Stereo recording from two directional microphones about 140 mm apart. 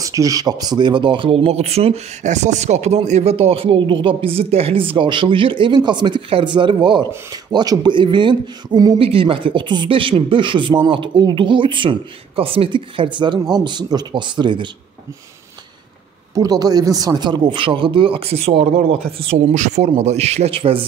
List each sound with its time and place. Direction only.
0.0 s speech: 25° right (ahead or behind)
16.3 s speech: 25° right (ahead or behind); by 19.4 s 45° right (ahead or behind)
19.5 s speech: 60° right (ahead or behind); by 20.8 s 40° right (ahead or behind)